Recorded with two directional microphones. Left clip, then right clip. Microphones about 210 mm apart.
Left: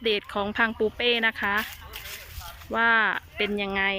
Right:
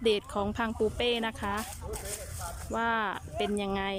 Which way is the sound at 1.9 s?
55° right (ahead or behind).